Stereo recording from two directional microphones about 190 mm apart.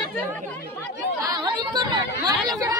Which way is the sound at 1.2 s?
20° right (ahead or behind).